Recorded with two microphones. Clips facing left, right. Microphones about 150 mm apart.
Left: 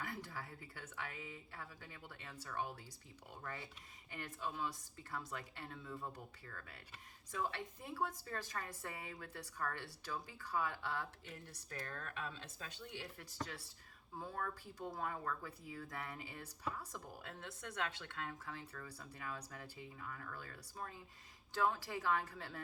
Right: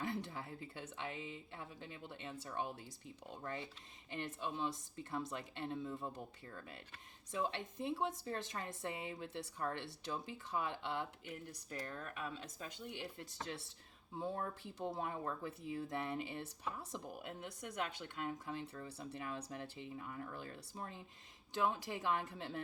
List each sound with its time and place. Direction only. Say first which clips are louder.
0.0 s speech: right 5 dB; 25° right (ahead or behind)